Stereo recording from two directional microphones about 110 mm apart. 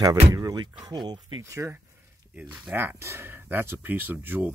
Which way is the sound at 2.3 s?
15° right (ahead or behind).